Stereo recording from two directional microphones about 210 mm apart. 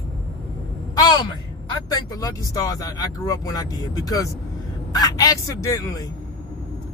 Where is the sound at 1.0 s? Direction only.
20° left (ahead or behind).